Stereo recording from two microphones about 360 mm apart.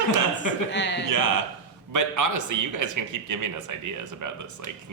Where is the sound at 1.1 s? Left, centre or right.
Right.